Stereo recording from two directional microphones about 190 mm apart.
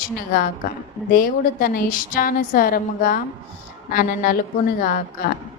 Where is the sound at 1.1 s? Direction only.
50° left (ahead or behind).